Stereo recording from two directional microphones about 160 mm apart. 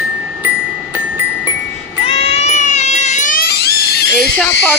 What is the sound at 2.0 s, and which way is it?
Cat, 35° left (ahead or behind).